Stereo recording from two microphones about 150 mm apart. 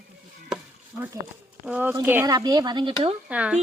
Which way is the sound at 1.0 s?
15° right (ahead or behind).